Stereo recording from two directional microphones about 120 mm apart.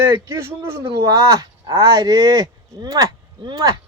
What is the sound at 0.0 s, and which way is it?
Speech, 20° right (ahead or behind).